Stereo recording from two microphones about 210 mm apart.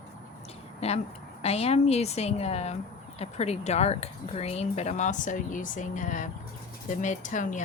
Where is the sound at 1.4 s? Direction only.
30° left (ahead or behind).